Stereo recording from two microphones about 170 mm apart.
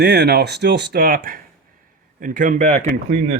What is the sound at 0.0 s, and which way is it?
Speech, 80° right.